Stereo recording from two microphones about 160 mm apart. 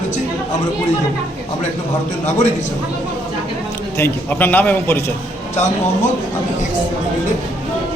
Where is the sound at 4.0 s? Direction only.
10° left (ahead or behind).